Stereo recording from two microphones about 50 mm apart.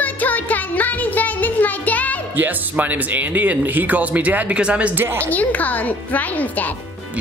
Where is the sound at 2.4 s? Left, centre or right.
Right.